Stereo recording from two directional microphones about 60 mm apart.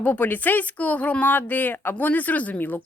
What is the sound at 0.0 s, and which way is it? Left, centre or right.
Speech, left.